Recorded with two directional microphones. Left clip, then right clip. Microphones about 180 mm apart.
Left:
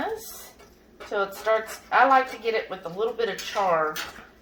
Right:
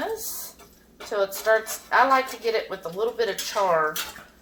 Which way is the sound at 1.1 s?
35° right (ahead or behind).